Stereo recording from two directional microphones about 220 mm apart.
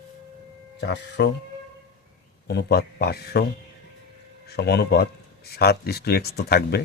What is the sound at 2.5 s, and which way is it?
Speech, 50° left (ahead or behind).